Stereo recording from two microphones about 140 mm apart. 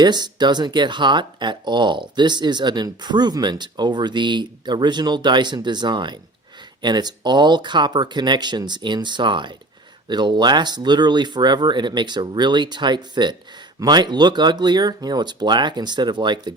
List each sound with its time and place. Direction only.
0.0 s speech: 30° right (ahead or behind)